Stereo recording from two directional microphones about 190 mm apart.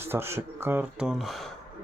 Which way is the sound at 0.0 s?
10° right (ahead or behind).